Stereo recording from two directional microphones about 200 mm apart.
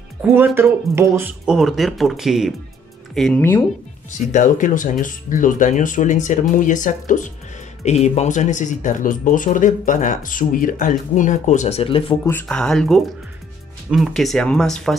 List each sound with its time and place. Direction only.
0.2 s speech: 10° right (ahead or behind); by 3.6 s 10° left (ahead or behind)
4.3 s speech: 40° left (ahead or behind)
12.3 s speech: 5° left (ahead or behind)